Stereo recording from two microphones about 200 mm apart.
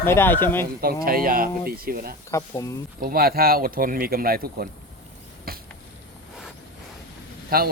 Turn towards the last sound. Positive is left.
turn(degrees=-50)  # may be behind; listen again after turning